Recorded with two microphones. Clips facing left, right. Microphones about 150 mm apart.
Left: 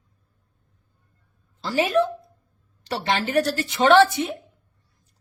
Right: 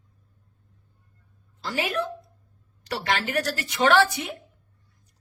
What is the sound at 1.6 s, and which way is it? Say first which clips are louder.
Speech: left 7 dB; 25° left (ahead or behind).